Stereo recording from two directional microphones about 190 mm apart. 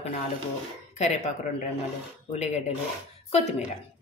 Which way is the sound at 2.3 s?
35° left (ahead or behind).